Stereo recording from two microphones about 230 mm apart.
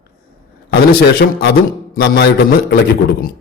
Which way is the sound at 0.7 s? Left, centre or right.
Left.